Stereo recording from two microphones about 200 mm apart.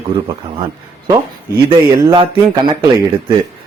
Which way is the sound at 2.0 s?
25° right (ahead or behind).